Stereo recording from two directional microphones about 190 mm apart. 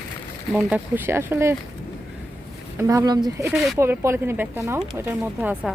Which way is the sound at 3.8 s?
15° right (ahead or behind).